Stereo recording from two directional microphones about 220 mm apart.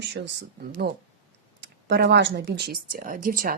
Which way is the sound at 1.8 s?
50° right (ahead or behind).